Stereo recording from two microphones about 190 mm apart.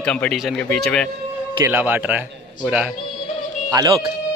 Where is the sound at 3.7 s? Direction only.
20° right (ahead or behind).